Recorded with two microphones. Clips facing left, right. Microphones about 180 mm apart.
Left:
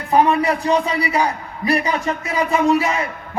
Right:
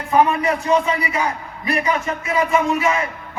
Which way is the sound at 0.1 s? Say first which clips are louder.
Even; 35° left (ahead or behind).